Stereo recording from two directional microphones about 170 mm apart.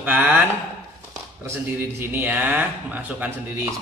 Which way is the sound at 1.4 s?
15° right (ahead or behind).